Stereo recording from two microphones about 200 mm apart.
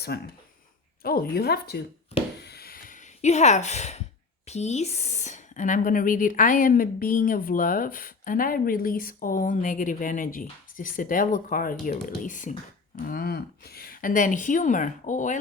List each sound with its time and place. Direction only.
0.1 s a woman's voice: 55° left (ahead or behind)
2.4 s a sound: 55° left (ahead or behind); by 4.0 s 35° left (ahead or behind)
4.4 s a woman's voice: 35° left (ahead or behind)